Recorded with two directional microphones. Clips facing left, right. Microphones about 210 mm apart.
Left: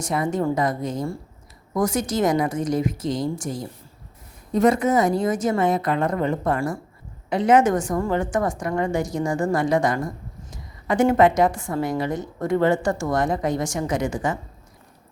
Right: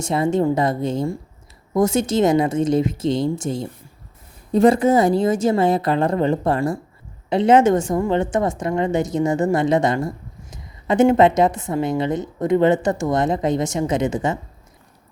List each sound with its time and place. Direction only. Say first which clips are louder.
0.0 s a woman's voice: right 4 dB; 25° right (ahead or behind)